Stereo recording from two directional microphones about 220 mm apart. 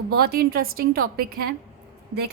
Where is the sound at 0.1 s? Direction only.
45° right (ahead or behind).